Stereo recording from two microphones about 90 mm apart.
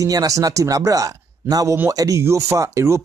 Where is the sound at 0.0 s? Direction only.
40° right (ahead or behind).